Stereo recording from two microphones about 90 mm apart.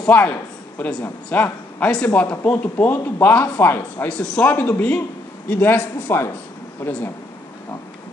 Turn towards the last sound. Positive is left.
turn(degrees=25)  # may be behind; listen again after turning